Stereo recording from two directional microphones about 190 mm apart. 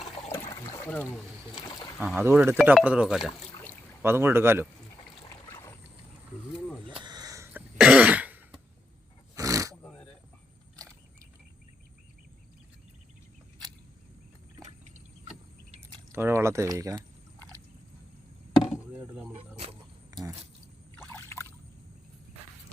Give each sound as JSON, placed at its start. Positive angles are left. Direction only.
{"t": 0.3, "sound": "trickle", "side_deg": 10}
{"t": 0.9, "sound": "speech", "side_deg": 5}
{"t": 2.2, "sound": "speech", "side_deg": -10}
{"t": 4.0, "sound": "speech", "side_deg": -10}
{"t": 7.0, "sound": "throat clearing", "side_deg": -20}
{"t": 9.3, "sound": "a sound", "side_deg": -15}
{"t": 16.1, "sound": "a sound", "side_deg": -15}
{"t": 18.6, "sound": "chop", "side_deg": -5}
{"t": 19.3, "sound": "wild animals", "side_deg": -30}
{"t": 20.9, "sound": "a sound", "side_deg": 15}